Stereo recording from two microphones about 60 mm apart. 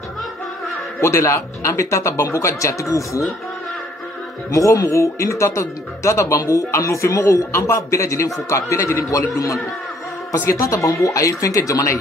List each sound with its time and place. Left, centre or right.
1.0 s speech: left
4.5 s speech: left
10.5 s speech: left